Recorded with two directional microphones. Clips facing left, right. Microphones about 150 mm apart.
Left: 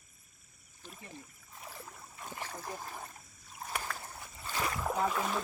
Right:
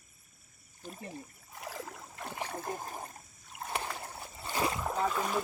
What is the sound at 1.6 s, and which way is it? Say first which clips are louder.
Stream: right 6 dB; 85° right.